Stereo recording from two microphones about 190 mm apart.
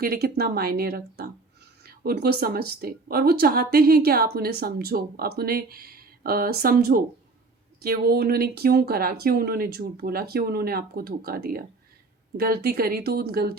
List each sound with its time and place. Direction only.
0.0 s speech: 55° right (ahead or behind)